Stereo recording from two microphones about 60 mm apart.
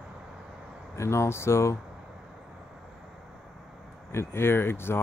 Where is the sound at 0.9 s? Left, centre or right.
Left.